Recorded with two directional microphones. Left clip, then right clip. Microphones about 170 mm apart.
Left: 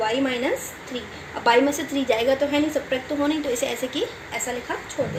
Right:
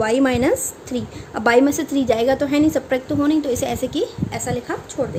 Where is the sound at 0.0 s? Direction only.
85° right.